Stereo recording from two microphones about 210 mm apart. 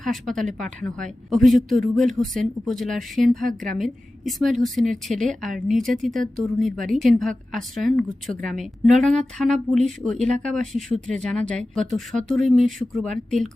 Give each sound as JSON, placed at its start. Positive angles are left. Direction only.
{"t": 0.0, "sound": "speech", "side_deg": 0}